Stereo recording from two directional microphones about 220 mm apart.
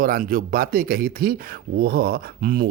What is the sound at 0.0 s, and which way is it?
Speech, 40° right (ahead or behind).